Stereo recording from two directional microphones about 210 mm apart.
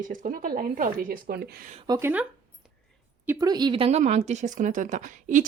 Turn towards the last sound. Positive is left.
turn(degrees=-40)  # may be behind; listen again after turning